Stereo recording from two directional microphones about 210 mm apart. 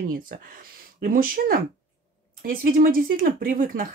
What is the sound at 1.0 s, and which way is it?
Speech, 40° right (ahead or behind).